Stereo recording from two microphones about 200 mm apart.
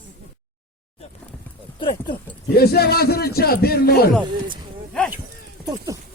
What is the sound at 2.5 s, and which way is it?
A man's voice, 50° left (ahead or behind).